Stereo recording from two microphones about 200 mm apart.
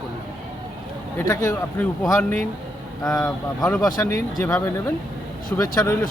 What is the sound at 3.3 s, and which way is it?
Speech, 5° left (ahead or behind).